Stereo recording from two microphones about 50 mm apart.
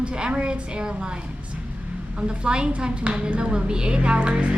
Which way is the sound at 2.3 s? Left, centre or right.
Centre.